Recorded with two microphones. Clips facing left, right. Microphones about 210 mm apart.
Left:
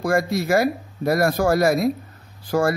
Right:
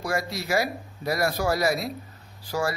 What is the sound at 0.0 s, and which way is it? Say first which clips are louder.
Speech: left 8 dB; 50° left (ahead or behind).